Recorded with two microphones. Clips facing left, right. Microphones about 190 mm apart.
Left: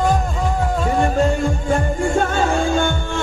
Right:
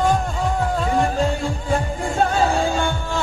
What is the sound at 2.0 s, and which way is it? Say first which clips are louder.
Music: left 1 dB; 35° right (ahead or behind).